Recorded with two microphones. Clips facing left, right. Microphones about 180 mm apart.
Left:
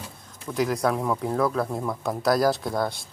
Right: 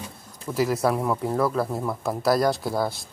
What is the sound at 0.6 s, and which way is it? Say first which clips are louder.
Speech: right 1 dB; 5° right (ahead or behind).